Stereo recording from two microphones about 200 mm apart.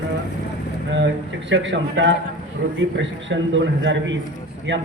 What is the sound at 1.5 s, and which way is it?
A man's voice, 65° right (ahead or behind).